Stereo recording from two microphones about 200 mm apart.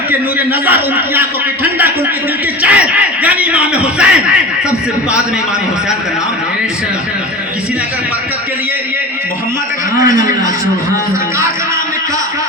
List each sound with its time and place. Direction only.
0.6 s a man's voice: 10° right (ahead or behind)
2.6 s a man's voice: 5° right (ahead or behind)
10.0 s a man's voice: 40° left (ahead or behind)